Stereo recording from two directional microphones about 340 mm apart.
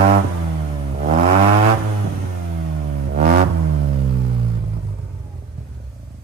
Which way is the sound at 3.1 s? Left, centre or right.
Right.